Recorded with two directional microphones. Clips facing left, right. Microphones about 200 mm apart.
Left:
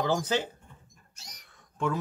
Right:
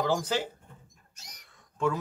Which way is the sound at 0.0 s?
Centre (ahead or behind).